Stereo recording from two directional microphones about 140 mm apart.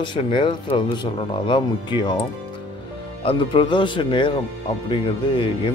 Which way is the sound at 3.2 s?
35° left (ahead or behind).